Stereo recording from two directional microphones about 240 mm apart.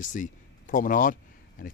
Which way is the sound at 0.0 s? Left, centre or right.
Left.